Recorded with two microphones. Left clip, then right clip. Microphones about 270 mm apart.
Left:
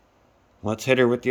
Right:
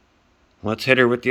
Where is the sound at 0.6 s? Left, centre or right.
Right.